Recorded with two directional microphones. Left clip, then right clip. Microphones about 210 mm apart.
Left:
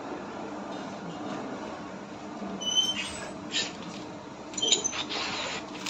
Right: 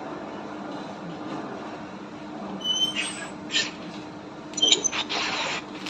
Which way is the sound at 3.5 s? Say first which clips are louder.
Right 5 dB; 15° right (ahead or behind).